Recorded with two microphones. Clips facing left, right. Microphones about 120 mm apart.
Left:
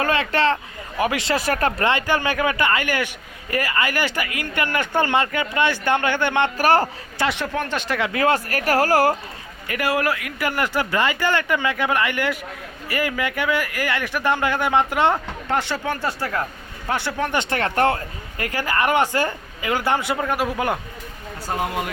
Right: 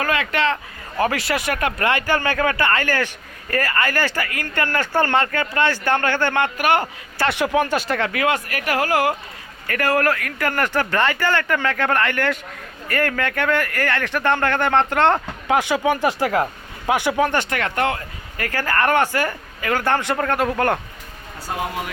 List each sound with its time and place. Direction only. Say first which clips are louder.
0.0 s speech: left 1 dB; 30° left (ahead or behind)
0.9 s speech: right 1 dB; 15° left (ahead or behind)
1.4 s speech: left 1 dB; 35° left (ahead or behind)
1.9 s speech: even; 20° left (ahead or behind)
6.6 s speech: left 2 dB; 35° left (ahead or behind)
8.1 s speech: left 2 dB; 35° left (ahead or behind)
9.6 s speech: right 2 dB; 15° left (ahead or behind)
15.4 s speech: right 5 dB; 10° right (ahead or behind)
17.5 s speech: left 2 dB; 35° left (ahead or behind)
18.3 s speech: right 1 dB; 20° left (ahead or behind)